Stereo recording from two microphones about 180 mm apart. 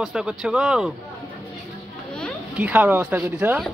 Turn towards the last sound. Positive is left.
turn(degrees=-10)  # may be behind; listen again after turning